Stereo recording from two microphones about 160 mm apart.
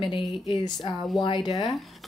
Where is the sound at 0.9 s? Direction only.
Centre (ahead or behind).